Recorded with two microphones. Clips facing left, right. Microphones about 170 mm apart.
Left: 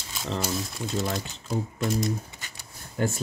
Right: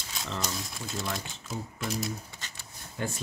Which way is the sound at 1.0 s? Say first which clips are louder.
Left 5 dB; 45° left (ahead or behind).